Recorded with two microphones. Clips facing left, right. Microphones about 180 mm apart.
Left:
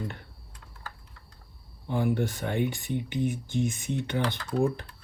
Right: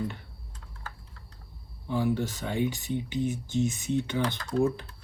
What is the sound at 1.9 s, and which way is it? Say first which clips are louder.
Speech: even; 55° left (ahead or behind).